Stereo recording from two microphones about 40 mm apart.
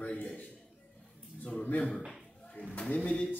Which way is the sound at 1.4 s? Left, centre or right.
Left.